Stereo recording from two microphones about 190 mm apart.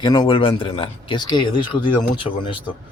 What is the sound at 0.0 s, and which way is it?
Speech, 20° left (ahead or behind).